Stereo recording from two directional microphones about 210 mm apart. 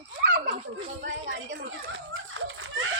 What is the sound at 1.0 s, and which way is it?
Speech, 60° right (ahead or behind).